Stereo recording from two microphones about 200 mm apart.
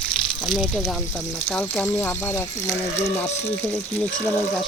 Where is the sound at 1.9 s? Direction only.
10° left (ahead or behind).